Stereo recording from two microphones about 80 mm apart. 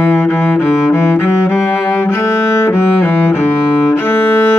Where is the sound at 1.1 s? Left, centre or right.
Left.